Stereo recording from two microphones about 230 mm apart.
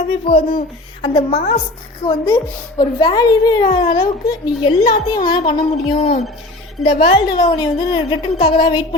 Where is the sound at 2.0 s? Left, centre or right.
Centre.